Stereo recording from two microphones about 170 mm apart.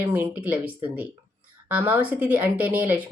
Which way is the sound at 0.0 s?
15° right (ahead or behind).